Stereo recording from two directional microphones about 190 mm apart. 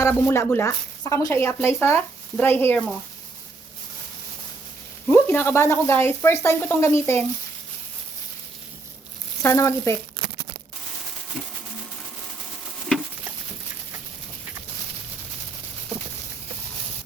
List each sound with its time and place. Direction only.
0.0 s speech: 15° left (ahead or behind)
5.1 s speech: 10° left (ahead or behind)
9.4 s speech: 15° left (ahead or behind)